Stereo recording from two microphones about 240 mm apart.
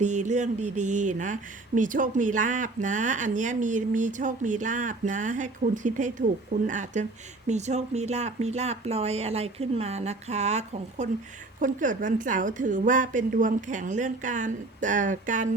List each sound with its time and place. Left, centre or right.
0.0 s speech: right